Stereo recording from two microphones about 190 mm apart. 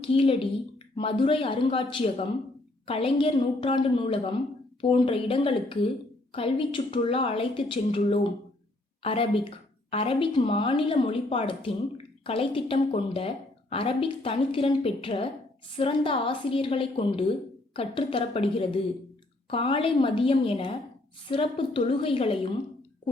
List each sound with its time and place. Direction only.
0.0 s a woman's voice: 30° left (ahead or behind)